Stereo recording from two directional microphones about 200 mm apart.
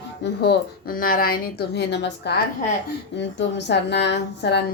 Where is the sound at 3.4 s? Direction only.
60° left (ahead or behind).